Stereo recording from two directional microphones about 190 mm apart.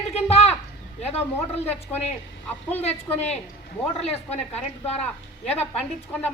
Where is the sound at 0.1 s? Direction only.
35° left (ahead or behind).